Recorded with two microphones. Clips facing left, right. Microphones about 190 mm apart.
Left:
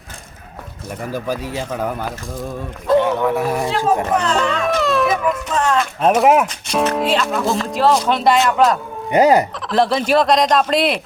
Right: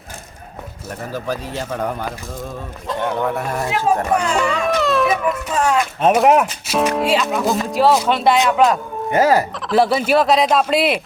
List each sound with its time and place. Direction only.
1.1 s speech: 10° left (ahead or behind)
3.7 s speech: 10° right (ahead or behind)
9.1 s speech: 20° left (ahead or behind)
9.6 s speech: 5° right (ahead or behind)